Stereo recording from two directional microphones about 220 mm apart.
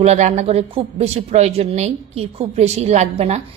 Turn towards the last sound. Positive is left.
turn(degrees=-30)  # may be behind; listen again after turning